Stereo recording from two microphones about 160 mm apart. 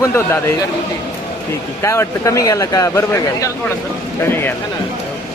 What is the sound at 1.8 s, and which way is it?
A man's voice, 20° left (ahead or behind).